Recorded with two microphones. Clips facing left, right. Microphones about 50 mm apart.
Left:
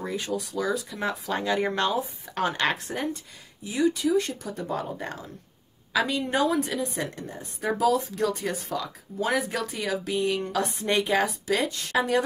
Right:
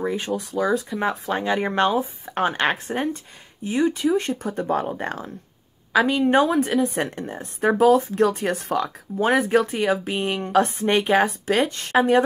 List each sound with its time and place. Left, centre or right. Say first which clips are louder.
0.3 s a woman's voice: right 4 dB; right
5.9 s a woman's voice: right 7 dB; right
9.2 s a woman's voice: right 8 dB; right